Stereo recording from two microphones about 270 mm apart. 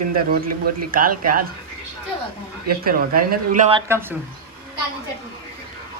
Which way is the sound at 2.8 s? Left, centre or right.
Right.